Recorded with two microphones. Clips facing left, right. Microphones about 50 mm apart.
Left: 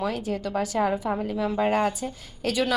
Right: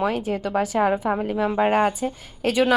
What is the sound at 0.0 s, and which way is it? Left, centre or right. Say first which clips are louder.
A woman's voice: right 4 dB; right.